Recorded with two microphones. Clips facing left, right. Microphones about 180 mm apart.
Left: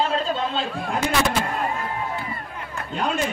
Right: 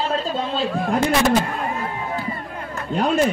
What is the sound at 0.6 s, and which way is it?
Speech, 40° right (ahead or behind).